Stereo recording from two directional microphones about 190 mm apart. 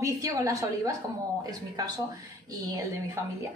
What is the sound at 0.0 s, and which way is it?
Speech, 15° right (ahead or behind).